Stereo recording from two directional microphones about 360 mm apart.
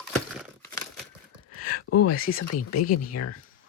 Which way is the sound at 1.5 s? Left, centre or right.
Left.